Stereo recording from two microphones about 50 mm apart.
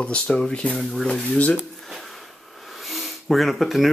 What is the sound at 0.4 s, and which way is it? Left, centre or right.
Speech, left.